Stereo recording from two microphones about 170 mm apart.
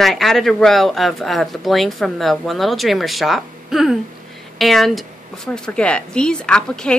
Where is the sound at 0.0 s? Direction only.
Centre (ahead or behind).